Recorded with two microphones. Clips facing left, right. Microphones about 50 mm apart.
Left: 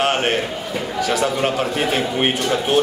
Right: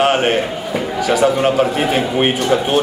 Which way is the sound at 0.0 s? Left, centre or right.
Centre.